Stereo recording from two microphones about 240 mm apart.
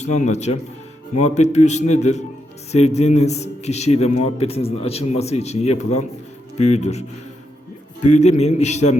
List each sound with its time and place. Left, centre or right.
0.0 s a man's voice: left
8.0 s a man's voice: left